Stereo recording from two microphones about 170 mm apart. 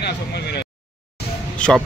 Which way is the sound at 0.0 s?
75° left (ahead or behind).